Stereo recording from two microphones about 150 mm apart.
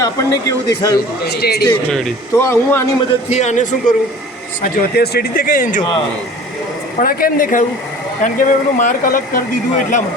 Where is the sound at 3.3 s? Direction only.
50° left (ahead or behind).